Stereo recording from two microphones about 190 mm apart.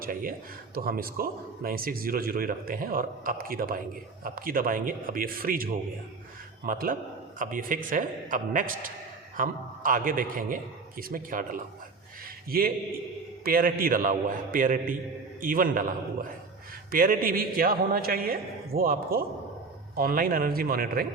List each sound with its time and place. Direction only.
0.0 s speech: 50° right (ahead or behind)
6.7 s speech: 50° right (ahead or behind)
16.9 s speech: 50° right (ahead or behind)